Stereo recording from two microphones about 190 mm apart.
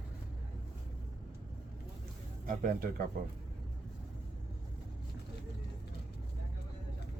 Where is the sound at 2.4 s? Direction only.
45° right (ahead or behind).